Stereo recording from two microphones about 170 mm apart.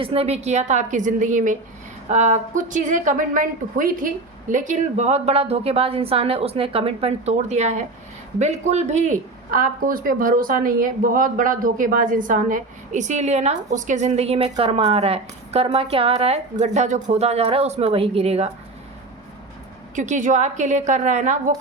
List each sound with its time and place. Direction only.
0.0 s a woman's voice: 35° right (ahead or behind)
20.0 s speech: 45° right (ahead or behind)